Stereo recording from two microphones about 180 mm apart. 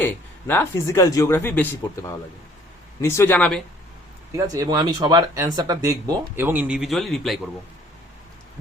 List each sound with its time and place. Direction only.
0.0 s speech: 10° left (ahead or behind)
4.3 s speech: 20° right (ahead or behind); by 7.3 s centre (ahead or behind)